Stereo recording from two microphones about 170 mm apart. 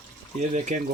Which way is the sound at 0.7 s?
45° right (ahead or behind).